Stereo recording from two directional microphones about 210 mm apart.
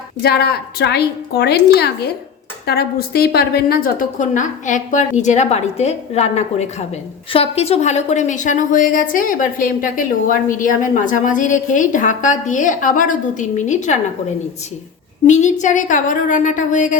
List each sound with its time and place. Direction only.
0.2 s a woman's voice: 50° left (ahead or behind)
15.3 s a woman's voice: 35° left (ahead or behind)